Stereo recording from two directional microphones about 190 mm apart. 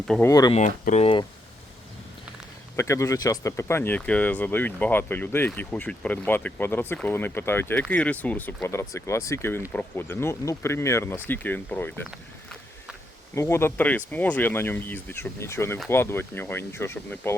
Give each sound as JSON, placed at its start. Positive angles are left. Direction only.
{"t": 0.3, "sound": "speech", "side_deg": 20}
{"t": 0.9, "sound": "speech", "side_deg": 35}
{"t": 2.7, "sound": "speech", "side_deg": 15}
{"t": 13.3, "sound": "speech", "side_deg": 15}